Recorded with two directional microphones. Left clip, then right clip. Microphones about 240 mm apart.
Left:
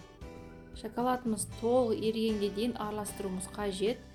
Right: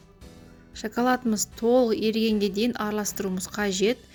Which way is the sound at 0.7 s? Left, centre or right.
Right.